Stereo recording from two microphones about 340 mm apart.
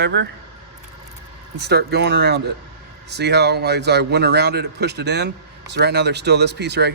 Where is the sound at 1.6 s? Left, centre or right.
Right.